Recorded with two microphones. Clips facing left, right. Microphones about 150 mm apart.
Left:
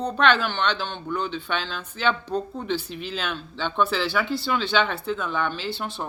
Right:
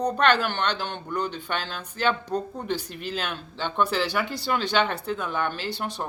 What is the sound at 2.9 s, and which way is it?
Speech, 50° right (ahead or behind).